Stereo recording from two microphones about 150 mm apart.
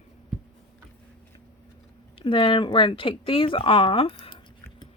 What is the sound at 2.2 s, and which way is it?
Speech, 35° left (ahead or behind).